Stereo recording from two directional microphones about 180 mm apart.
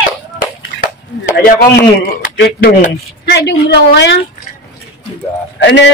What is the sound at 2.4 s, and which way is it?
A woman's voice, 65° left (ahead or behind).